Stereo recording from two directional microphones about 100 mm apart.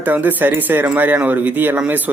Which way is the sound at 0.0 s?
15° right (ahead or behind).